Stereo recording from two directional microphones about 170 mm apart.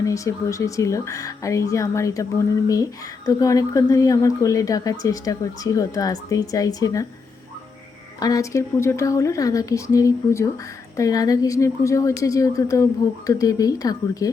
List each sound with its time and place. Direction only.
0.0 s speech: 20° left (ahead or behind)
8.2 s speech: 20° left (ahead or behind)